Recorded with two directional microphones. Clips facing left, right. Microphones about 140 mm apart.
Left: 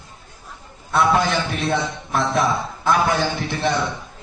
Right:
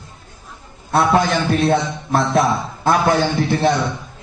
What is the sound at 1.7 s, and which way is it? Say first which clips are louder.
A man's voice: right 5 dB; 35° right (ahead or behind).